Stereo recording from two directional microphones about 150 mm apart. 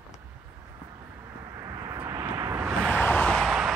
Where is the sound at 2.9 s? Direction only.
10° left (ahead or behind).